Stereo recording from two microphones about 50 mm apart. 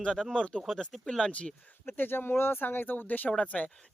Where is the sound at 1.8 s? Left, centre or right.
Left.